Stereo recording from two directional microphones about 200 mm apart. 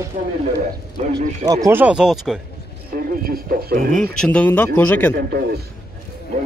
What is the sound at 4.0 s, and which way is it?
Speech, 5° left (ahead or behind).